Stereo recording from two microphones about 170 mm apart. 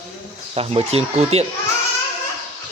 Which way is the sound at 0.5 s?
35° right (ahead or behind).